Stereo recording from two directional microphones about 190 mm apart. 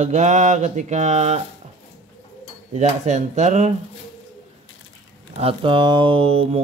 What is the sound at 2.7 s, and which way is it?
Speech, 40° right (ahead or behind).